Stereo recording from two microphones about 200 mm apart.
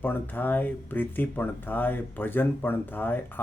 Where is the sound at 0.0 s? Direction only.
10° left (ahead or behind).